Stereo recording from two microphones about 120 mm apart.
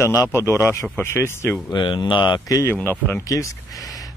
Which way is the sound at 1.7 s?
40° left (ahead or behind).